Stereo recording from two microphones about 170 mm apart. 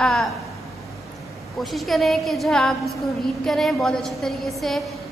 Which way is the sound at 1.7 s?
Centre (ahead or behind).